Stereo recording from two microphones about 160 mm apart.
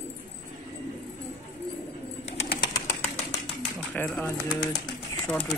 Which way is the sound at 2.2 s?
40° left (ahead or behind).